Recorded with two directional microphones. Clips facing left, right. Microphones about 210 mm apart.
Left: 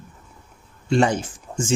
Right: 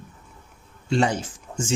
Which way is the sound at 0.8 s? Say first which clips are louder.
Left 3 dB; 50° left (ahead or behind).